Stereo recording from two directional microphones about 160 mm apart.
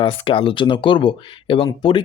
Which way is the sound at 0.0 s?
35° left (ahead or behind).